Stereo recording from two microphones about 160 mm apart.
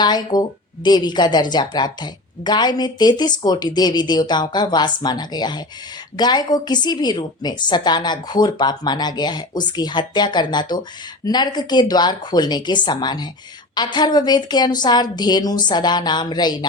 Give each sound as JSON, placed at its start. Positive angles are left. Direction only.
{"t": 0.0, "sound": "a woman's voice", "side_deg": 25}